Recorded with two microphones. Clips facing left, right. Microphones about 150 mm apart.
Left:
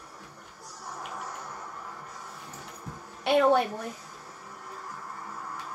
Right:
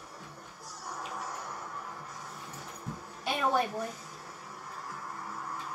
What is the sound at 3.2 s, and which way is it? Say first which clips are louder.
Speech: left 8 dB; 70° left (ahead or behind).